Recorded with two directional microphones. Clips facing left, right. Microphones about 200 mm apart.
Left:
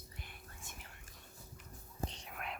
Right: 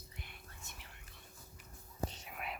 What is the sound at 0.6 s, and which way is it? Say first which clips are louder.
Whispering: left 1 dB; 45° left (ahead or behind).